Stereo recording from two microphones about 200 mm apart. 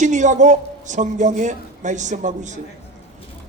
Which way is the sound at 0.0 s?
35° right (ahead or behind).